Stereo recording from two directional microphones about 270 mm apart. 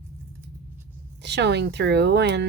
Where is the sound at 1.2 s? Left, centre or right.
Right.